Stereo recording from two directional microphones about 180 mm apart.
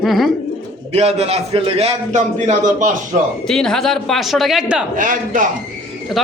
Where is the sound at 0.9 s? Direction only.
35° right (ahead or behind).